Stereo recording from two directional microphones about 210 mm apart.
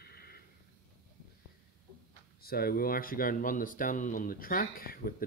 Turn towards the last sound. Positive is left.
turn(degrees=45)  # may be behind; listen again after turning